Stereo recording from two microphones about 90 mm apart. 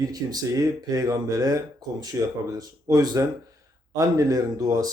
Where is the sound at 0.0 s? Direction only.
45° right (ahead or behind).